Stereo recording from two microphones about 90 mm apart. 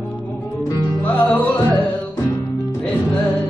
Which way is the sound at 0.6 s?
20° left (ahead or behind).